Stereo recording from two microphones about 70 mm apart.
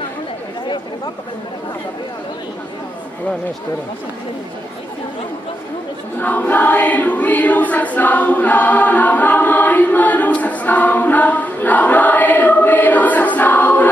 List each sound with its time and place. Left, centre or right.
6.1 s choir: left